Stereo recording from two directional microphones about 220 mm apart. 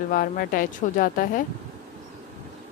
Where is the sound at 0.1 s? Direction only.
40° left (ahead or behind).